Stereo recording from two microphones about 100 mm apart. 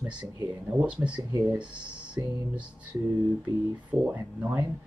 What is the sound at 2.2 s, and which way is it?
Speech, 30° right (ahead or behind).